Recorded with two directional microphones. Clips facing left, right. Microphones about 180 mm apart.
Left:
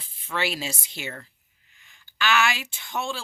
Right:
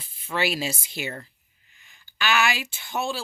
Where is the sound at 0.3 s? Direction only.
10° right (ahead or behind).